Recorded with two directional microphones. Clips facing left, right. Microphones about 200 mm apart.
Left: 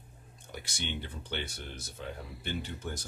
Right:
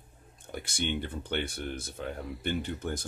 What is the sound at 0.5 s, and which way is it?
Speech, 50° right (ahead or behind).